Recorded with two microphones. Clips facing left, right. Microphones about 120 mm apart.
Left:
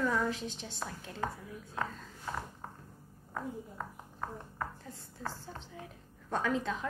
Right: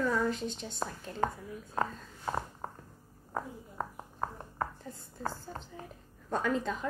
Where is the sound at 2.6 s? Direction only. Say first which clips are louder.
Right 4 dB; 40° right (ahead or behind).